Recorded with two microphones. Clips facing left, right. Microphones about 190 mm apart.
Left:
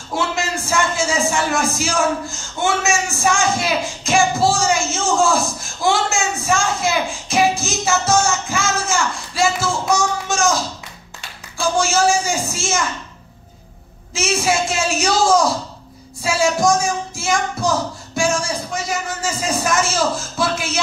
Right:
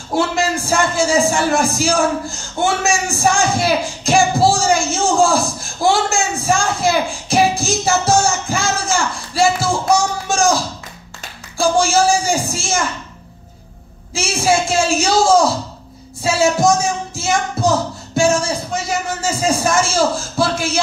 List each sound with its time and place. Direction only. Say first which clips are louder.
0.4 s a man's voice: right 3 dB; 35° right (ahead or behind)
6.1 s music: right 2 dB; 35° right (ahead or behind)
11.6 s a man's voice: right 3 dB; 30° right (ahead or behind)
14.1 s a man's voice: right 2 dB; 30° right (ahead or behind)